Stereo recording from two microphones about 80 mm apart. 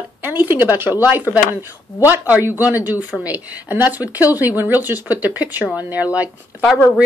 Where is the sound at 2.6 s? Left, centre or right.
Right.